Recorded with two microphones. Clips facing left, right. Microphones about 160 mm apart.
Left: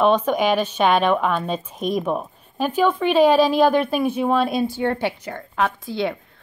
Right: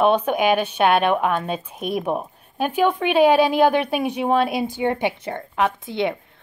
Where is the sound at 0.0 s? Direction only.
10° right (ahead or behind).